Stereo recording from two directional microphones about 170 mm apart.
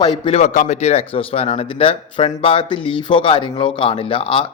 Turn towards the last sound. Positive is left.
turn(degrees=30)  # may be behind; listen again after turning